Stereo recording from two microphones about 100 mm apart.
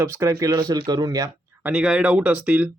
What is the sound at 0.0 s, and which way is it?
Speech, 30° right (ahead or behind).